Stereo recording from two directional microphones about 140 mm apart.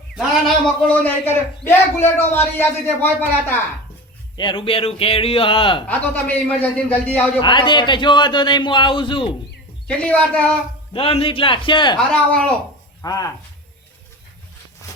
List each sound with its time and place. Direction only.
0.2 s speech: centre (ahead or behind)
0.9 s a man's voice: 15° left (ahead or behind)
4.4 s a man's voice: 35° left (ahead or behind)
5.9 s a man's voice: 10° left (ahead or behind)
7.4 s a man's voice: 35° left (ahead or behind)
9.8 s a man's voice: 10° left (ahead or behind)
10.9 s a man's voice: 40° left (ahead or behind)
11.9 s a man's voice: 5° left (ahead or behind)
13.0 s speech: 25° left (ahead or behind)